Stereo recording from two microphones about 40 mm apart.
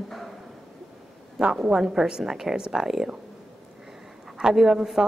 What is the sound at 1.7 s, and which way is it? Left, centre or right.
A woman's voice, centre.